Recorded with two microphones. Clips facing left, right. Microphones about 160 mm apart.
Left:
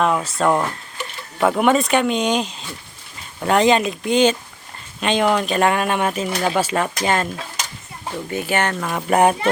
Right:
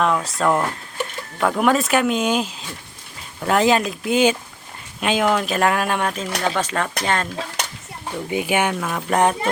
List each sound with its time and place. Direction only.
0.0 s speech: centre (ahead or behind)
7.6 s a sound: 60° right (ahead or behind)
8.3 s speech: 15° right (ahead or behind)
9.0 s speech: 10° left (ahead or behind)